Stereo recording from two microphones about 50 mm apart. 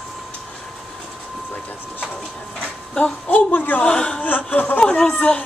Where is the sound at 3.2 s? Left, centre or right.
Left.